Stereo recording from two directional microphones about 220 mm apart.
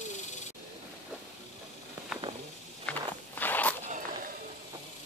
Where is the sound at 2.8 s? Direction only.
10° left (ahead or behind).